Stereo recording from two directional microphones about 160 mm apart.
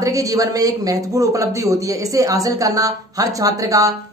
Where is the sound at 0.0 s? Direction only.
20° right (ahead or behind).